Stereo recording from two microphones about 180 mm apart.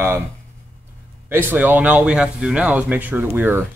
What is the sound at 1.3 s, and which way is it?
Speech, 10° right (ahead or behind).